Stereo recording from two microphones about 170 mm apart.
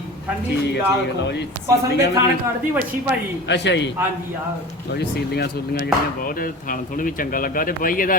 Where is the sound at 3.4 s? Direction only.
90° left.